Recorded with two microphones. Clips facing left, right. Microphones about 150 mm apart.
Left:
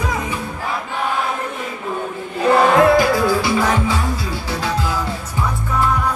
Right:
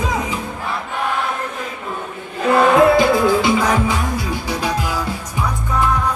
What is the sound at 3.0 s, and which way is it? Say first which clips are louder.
Music: right 2 dB; 20° right (ahead or behind).